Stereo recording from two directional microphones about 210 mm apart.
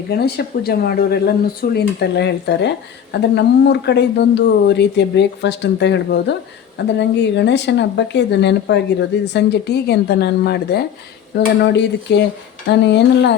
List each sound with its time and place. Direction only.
0.2 s speech: 50° left (ahead or behind)